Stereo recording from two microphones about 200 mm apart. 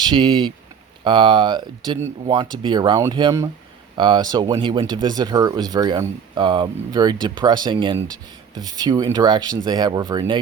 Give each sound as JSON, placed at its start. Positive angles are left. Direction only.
{"t": 0.1, "sound": "speech", "side_deg": -25}